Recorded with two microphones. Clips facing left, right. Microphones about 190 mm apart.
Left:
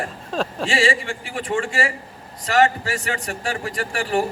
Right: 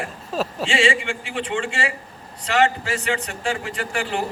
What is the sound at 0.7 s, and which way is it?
A man's voice, 40° left (ahead or behind).